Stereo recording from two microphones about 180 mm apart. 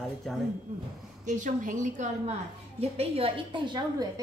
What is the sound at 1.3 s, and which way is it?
A woman's voice, 45° right (ahead or behind).